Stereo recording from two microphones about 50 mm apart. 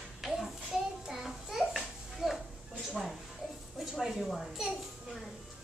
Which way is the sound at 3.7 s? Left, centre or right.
Centre.